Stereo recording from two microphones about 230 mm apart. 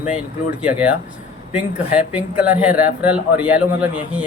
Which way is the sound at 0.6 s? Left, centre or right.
Centre.